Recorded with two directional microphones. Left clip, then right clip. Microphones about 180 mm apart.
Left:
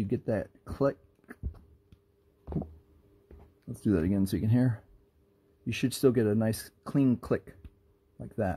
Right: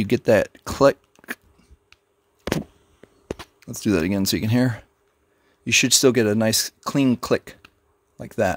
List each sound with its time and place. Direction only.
0.0 s speech: 35° right (ahead or behind)
3.5 s speech: 25° right (ahead or behind)